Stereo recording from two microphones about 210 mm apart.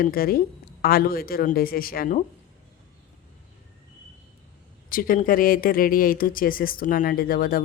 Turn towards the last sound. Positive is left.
turn(degrees=45)  # may be behind; listen again after turning